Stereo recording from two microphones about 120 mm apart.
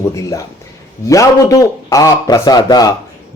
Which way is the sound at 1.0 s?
25° left (ahead or behind).